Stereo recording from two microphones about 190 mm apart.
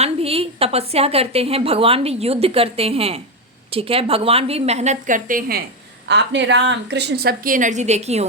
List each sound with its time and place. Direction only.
0.0 s a woman's voice: 30° right (ahead or behind); by 5.6 s 50° right (ahead or behind)
6.1 s a woman's voice: 65° right (ahead or behind); by 8.3 s 35° right (ahead or behind)